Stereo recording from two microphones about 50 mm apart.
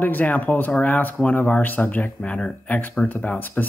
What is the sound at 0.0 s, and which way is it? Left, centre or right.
Speech, left.